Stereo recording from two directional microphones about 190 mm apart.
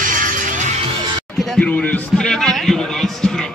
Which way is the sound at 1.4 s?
5° left (ahead or behind).